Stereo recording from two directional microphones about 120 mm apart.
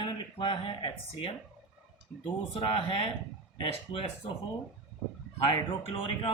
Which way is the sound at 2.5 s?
50° left (ahead or behind).